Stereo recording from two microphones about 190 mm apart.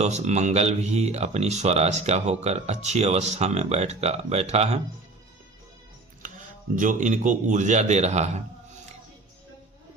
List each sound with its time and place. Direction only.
0.0 s speech: 35° right (ahead or behind)
6.7 s speech: 40° right (ahead or behind)